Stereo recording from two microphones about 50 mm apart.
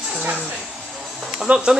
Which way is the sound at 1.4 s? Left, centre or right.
Centre.